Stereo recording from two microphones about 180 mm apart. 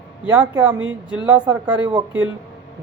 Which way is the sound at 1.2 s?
10° right (ahead or behind).